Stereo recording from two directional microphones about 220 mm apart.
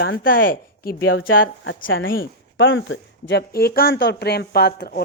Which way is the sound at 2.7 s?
60° left (ahead or behind).